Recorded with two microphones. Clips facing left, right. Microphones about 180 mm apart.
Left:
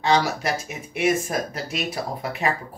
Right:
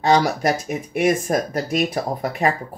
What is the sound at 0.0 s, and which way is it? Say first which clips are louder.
Speech: right 4 dB; 45° right (ahead or behind).